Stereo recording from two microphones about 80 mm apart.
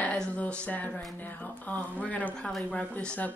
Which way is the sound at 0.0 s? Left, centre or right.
Centre.